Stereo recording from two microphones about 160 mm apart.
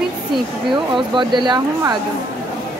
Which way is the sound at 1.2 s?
30° right (ahead or behind).